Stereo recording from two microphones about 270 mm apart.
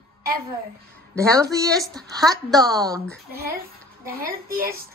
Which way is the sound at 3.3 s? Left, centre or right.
Right.